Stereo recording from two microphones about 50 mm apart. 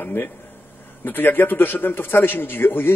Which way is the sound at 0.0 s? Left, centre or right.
Left.